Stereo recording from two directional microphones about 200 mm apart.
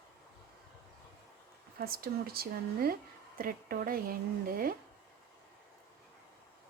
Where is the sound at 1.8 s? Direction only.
50° right (ahead or behind).